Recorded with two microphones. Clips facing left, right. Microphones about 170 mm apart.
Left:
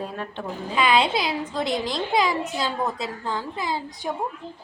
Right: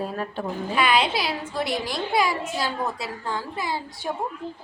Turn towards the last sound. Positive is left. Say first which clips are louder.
# left 1 dB
turn(degrees=20)  # may be behind; listen again after turning